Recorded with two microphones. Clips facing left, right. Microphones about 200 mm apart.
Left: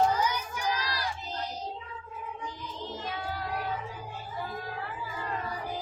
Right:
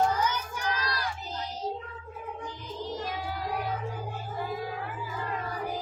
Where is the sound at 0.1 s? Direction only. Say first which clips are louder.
Even; 10° left (ahead or behind).